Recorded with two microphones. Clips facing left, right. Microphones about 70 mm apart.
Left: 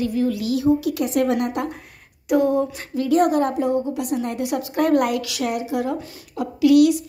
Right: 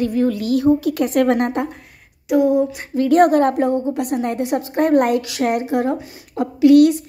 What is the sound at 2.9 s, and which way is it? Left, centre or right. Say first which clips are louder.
A woman's voice: right 5 dB; right.